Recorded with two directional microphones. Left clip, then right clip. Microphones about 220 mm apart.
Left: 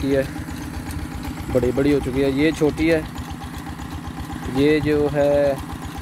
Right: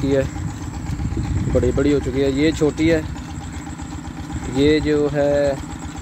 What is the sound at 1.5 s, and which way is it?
Speech, 5° right (ahead or behind).